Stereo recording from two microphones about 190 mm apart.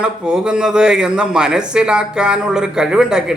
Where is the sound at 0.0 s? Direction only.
5° right (ahead or behind).